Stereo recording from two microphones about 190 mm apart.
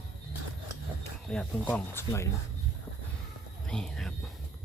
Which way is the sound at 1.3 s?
5° left (ahead or behind).